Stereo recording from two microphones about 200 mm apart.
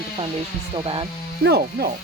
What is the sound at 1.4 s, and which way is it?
Speech, 55° right (ahead or behind).